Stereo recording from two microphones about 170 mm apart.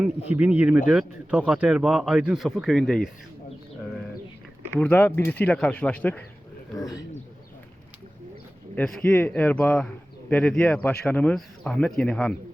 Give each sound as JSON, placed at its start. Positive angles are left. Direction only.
{"t": 0.3, "sound": "speech", "side_deg": -10}
{"t": 4.7, "sound": "speech", "side_deg": 10}
{"t": 6.7, "sound": "speech", "side_deg": 20}
{"t": 8.7, "sound": "speech", "side_deg": 5}